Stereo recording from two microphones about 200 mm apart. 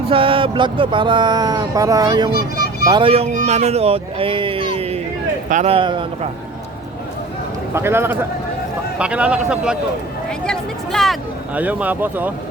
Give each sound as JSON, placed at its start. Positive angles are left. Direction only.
{"t": 0.1, "sound": "speech", "side_deg": -25}
{"t": 7.7, "sound": "a man's voice", "side_deg": -10}
{"t": 10.2, "sound": "a sound", "side_deg": 5}